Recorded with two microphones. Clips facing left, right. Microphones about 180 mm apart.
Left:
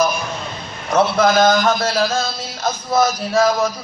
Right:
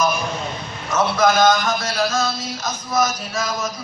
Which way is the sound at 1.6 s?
60° left (ahead or behind).